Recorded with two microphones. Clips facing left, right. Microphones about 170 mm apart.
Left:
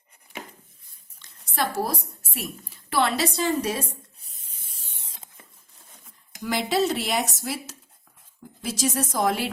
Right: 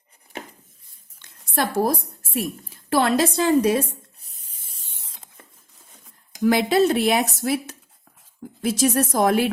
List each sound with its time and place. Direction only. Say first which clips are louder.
1.2 s a sound: right 3 dB; 50° right (ahead or behind)
2.3 s a woman's voice: right 8 dB; 45° right (ahead or behind)
6.4 s a woman's voice: right 6 dB; 55° right (ahead or behind)